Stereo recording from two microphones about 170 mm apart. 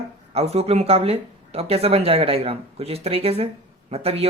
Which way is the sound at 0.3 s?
35° right (ahead or behind).